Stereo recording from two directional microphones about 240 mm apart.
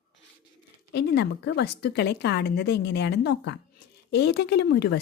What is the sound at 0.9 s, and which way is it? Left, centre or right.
Speech, left.